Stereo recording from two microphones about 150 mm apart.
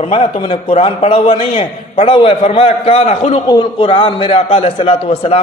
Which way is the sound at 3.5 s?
35° left (ahead or behind).